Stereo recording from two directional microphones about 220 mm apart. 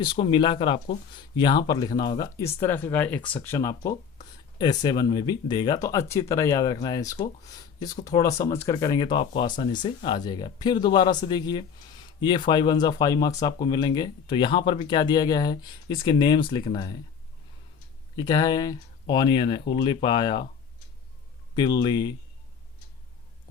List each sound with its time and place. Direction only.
0.0 s speech: 20° left (ahead or behind)
18.2 s speech: 20° left (ahead or behind)
21.5 s speech: 20° left (ahead or behind)